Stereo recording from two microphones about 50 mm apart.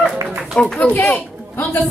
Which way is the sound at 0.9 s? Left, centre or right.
Left.